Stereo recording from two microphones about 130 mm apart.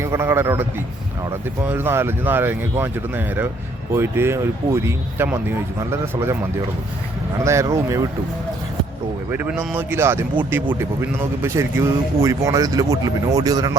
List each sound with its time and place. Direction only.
0.0 s speech: 20° right (ahead or behind)
7.4 s speech: 20° right (ahead or behind)
9.3 s speech: 15° right (ahead or behind); by 13.7 s 30° right (ahead or behind)